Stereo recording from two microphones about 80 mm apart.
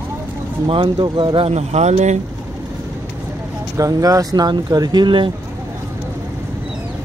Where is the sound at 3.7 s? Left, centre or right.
Right.